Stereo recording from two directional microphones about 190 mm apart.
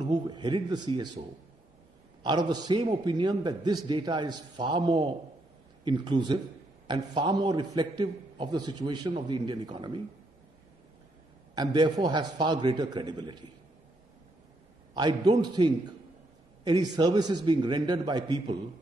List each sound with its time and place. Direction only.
0.0 s a man's voice: 20° right (ahead or behind)
2.2 s a man's voice: 25° right (ahead or behind)
11.5 s a man's voice: 20° right (ahead or behind)
15.0 s a man's voice: 20° right (ahead or behind)